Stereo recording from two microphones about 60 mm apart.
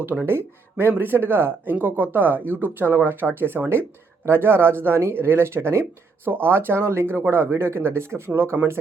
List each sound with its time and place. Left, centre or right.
0.0 s speech: right
0.3 s speech: right